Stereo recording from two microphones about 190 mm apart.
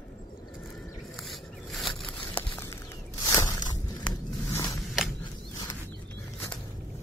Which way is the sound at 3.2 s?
20° left (ahead or behind).